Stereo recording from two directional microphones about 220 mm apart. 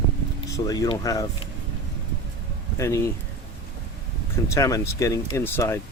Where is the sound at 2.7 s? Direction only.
15° left (ahead or behind).